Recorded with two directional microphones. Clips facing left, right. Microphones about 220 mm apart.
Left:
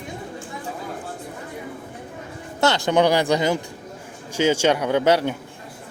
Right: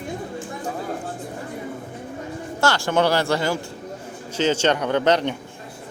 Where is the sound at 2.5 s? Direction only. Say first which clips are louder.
Left 2 dB; 20° left (ahead or behind).